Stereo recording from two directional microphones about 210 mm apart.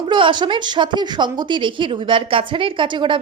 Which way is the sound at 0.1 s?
20° right (ahead or behind).